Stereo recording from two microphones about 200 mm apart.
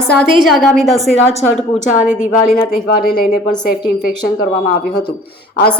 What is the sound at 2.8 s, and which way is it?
Speech, 50° left (ahead or behind).